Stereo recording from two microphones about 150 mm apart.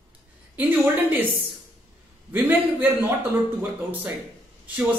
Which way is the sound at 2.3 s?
15° right (ahead or behind).